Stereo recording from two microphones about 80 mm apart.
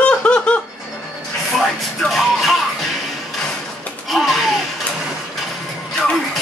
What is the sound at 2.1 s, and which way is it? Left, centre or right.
Music, centre.